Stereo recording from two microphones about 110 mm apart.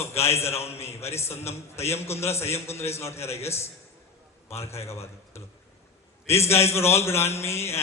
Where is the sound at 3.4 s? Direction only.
25° left (ahead or behind).